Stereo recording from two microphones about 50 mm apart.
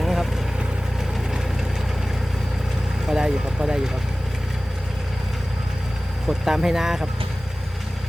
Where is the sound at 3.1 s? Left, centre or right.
Centre.